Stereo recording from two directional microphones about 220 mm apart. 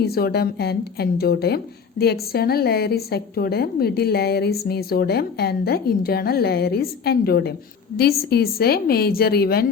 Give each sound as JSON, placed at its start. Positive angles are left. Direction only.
{"t": 0.0, "sound": "a woman's voice", "side_deg": 45}